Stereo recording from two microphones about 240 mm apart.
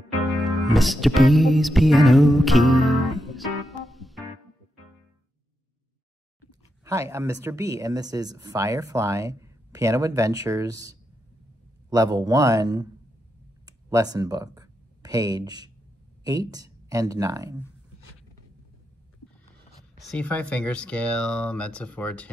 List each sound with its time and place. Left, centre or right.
0.2 s music: centre
6.8 s speech: centre
13.7 s a sound: centre
16.3 s speech: centre
20.0 s speech: centre